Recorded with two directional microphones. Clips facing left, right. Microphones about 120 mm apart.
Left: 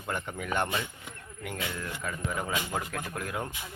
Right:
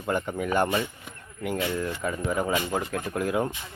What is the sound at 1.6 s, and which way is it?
Speech, 20° right (ahead or behind).